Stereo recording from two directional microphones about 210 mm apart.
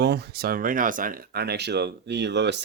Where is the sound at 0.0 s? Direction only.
50° right (ahead or behind).